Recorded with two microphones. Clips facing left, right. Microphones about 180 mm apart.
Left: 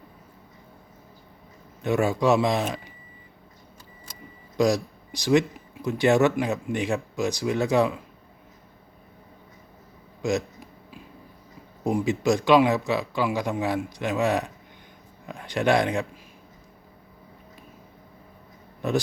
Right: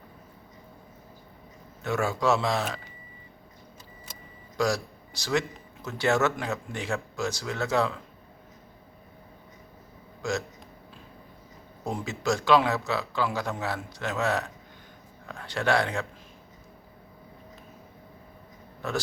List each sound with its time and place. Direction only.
1.8 s speech: 15° left (ahead or behind)
4.5 s speech: 20° left (ahead or behind)
10.2 s a sound: 15° left (ahead or behind)
11.9 s speech: 15° left (ahead or behind)
18.8 s speech: 15° left (ahead or behind)